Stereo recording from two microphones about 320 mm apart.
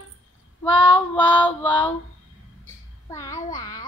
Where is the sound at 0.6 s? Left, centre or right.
Centre.